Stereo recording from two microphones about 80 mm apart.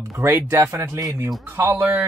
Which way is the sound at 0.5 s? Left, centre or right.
Right.